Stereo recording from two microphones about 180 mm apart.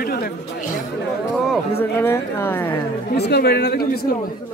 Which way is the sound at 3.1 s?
65° left (ahead or behind).